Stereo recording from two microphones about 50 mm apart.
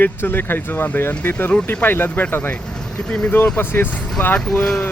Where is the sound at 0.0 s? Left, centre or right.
Left.